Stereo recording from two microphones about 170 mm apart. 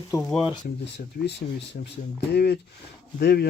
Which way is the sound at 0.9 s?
80° left.